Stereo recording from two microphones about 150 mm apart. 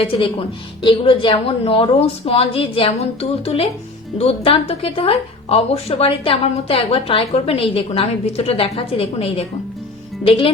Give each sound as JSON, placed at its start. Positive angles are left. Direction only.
{"t": 0.0, "sound": "a woman's voice", "side_deg": 35}